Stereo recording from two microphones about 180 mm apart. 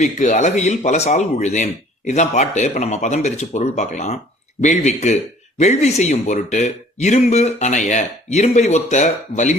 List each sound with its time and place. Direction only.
0.0 s speech: 40° left (ahead or behind)